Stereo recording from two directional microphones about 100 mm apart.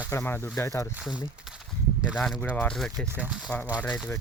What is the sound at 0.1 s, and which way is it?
Speech, 20° left (ahead or behind).